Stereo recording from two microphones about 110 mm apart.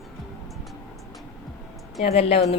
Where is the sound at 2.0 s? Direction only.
65° left (ahead or behind).